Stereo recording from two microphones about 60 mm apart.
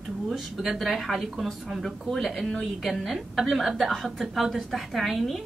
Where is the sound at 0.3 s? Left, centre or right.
Centre.